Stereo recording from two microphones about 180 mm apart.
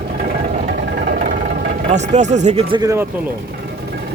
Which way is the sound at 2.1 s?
40° right (ahead or behind).